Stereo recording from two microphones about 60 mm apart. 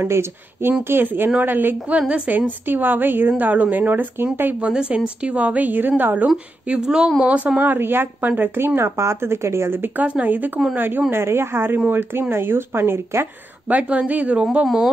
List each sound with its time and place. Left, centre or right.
0.1 s speech: right
2.0 s a woman's voice: right
4.6 s a woman's voice: centre
6.2 s speech: centre; by 9.8 s right
9.8 s a woman's voice: right
11.1 s speech: right
13.7 s a woman's voice: right
14.4 s speech: centre